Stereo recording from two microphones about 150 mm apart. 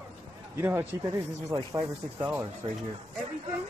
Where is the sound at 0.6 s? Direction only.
15° right (ahead or behind).